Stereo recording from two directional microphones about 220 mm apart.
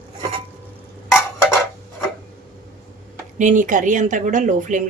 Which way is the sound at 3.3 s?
35° right (ahead or behind).